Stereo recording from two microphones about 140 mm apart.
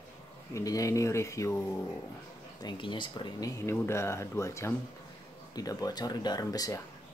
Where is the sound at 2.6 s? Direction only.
35° left (ahead or behind).